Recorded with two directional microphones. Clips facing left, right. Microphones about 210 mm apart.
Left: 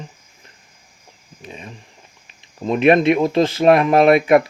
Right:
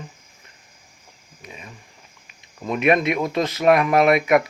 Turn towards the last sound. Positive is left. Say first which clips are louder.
# left 4 dB
turn(degrees=30)  # may be behind; listen again after turning